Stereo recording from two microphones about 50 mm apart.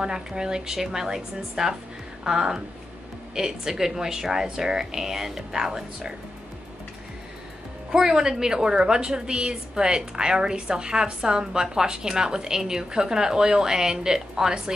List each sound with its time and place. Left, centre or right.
0.0 s a woman's voice: centre
7.9 s a woman's voice: centre